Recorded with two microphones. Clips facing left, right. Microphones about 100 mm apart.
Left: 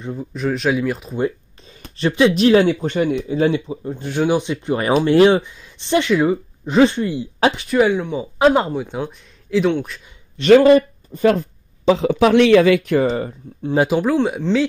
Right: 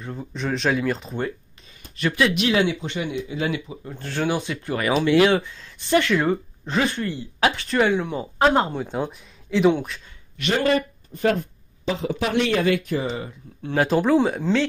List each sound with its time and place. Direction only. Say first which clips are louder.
0.1 s speech: left 5 dB; 5° left (ahead or behind)
2.0 s speech: left 6 dB; 25° left (ahead or behind)
2.3 s speech: left 8 dB; 35° left (ahead or behind)
3.9 s speech: left 6 dB; 15° left (ahead or behind)
5.0 s speech: left 5 dB; 35° left (ahead or behind)
5.3 s speech: left 4 dB; 20° left (ahead or behind)
6.1 s speech: left 4 dB; 10° left (ahead or behind)
6.8 s speech: left 10 dB; 25° left (ahead or behind)
7.5 s speech: left 4 dB; 5° left (ahead or behind)
10.4 s speech: left 14 dB; 25° left (ahead or behind)
12.0 s speech: left 9 dB; 90° left
13.0 s speech: left 9 dB; 45° left (ahead or behind)
13.6 s speech: left 5 dB; 15° left (ahead or behind)
13.9 s speech: left 1 dB; centre (ahead or behind)